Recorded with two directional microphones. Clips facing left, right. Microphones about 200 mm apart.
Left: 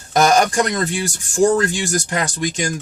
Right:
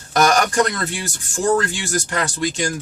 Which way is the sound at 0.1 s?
20° left (ahead or behind).